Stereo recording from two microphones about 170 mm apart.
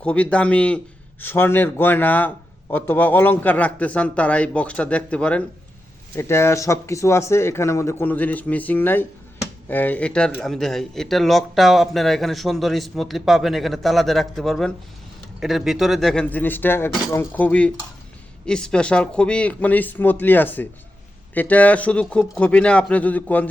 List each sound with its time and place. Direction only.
0.0 s a man's voice: 10° left (ahead or behind)